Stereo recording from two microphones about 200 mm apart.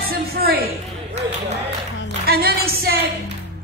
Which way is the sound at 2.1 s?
50° right (ahead or behind).